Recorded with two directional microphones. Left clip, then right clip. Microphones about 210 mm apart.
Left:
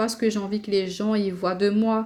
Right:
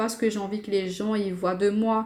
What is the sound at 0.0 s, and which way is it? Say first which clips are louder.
Speech: left 2 dB; 40° left (ahead or behind).